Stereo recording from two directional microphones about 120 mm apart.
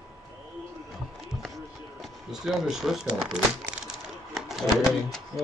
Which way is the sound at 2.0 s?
Centre (ahead or behind).